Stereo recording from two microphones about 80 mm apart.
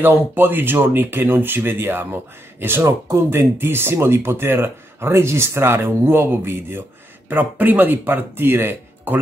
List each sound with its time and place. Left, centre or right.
0.0 s speech: right